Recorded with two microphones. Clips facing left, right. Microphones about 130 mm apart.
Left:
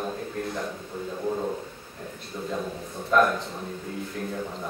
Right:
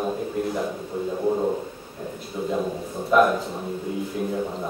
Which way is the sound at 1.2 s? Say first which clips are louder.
Right 5 dB; 20° right (ahead or behind).